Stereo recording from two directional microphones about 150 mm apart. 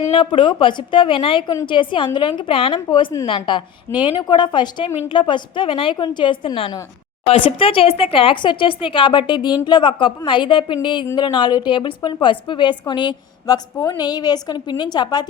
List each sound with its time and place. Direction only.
0.1 s a woman's voice: 35° left (ahead or behind)